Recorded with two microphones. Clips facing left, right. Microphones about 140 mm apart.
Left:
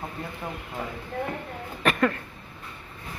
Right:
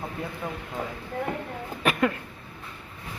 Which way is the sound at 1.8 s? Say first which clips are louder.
Left 1 dB; 10° right (ahead or behind).